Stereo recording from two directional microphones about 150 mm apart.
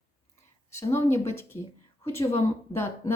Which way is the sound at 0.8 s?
20° left (ahead or behind).